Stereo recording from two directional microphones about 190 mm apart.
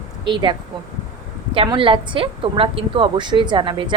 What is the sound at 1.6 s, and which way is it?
A woman's voice, 25° right (ahead or behind).